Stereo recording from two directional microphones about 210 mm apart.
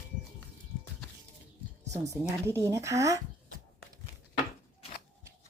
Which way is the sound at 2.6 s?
15° right (ahead or behind).